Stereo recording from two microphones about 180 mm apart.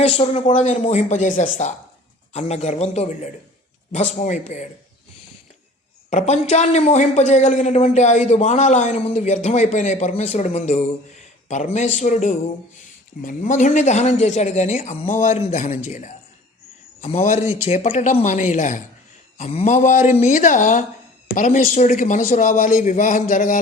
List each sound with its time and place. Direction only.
0.0 s speech: 35° left (ahead or behind)
6.1 s a man's voice: 40° left (ahead or behind)